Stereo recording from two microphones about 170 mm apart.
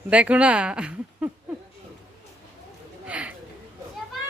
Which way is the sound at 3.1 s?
10° right (ahead or behind).